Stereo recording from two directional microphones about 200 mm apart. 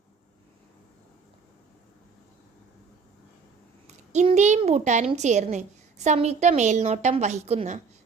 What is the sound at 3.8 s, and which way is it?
A child's voice, 35° right (ahead or behind).